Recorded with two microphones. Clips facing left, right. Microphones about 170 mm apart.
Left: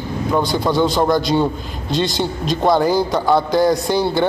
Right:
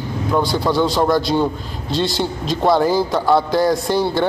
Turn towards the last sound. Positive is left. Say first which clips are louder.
# left 1 dB
turn(degrees=0)  # may be behind; listen again after turning